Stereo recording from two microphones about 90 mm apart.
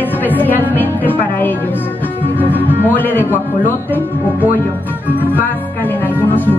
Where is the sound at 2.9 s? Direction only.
20° left (ahead or behind).